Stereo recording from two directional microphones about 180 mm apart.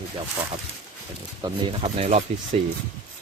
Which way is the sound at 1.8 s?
35° right (ahead or behind).